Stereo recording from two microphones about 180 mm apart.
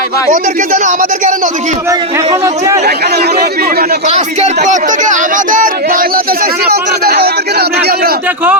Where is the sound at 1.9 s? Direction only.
20° right (ahead or behind).